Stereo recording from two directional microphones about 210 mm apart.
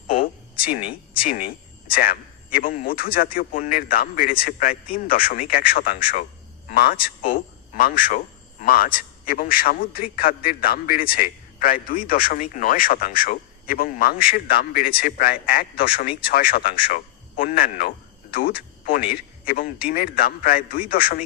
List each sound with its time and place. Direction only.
0.1 s a man's voice: 45° left (ahead or behind)